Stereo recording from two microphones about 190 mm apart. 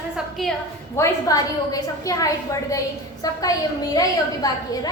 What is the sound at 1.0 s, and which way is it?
A woman's voice, 20° left (ahead or behind).